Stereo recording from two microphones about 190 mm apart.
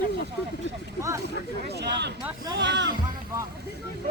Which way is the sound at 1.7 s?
60° right (ahead or behind).